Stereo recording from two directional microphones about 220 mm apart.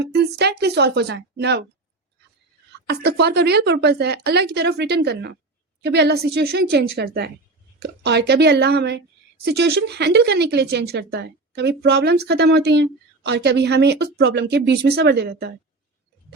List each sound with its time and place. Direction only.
0.0 s speech: 50° right (ahead or behind)
2.8 s speech: 45° right (ahead or behind)